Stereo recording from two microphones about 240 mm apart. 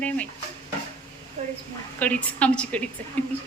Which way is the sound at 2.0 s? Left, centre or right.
Centre.